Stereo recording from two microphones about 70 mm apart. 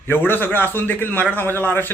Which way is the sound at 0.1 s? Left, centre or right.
Left.